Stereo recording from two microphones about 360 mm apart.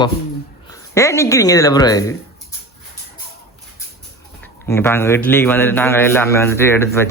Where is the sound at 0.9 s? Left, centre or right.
Centre.